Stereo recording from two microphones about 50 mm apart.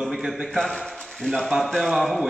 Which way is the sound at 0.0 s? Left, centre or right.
Centre.